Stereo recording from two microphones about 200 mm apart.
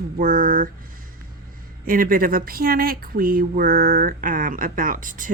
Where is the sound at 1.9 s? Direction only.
45° right (ahead or behind).